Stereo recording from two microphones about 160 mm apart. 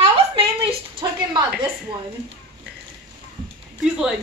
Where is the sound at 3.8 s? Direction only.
5° right (ahead or behind).